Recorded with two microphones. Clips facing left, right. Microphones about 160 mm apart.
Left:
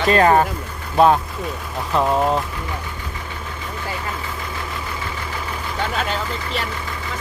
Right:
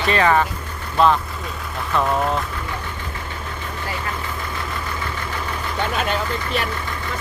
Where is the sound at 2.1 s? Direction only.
20° left (ahead or behind).